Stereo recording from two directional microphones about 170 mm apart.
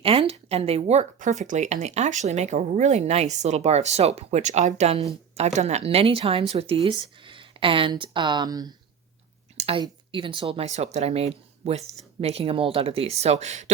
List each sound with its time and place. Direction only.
0.0 s speech: 35° right (ahead or behind)